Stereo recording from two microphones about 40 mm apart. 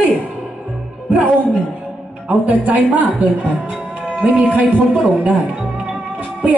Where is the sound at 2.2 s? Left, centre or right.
Right.